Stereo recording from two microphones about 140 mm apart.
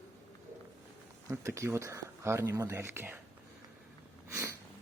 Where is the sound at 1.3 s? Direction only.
20° right (ahead or behind).